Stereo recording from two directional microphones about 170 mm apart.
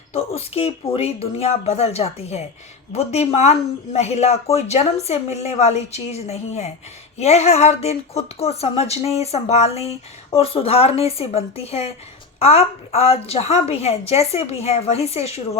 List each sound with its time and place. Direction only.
0.1 s a woman's voice: 35° left (ahead or behind)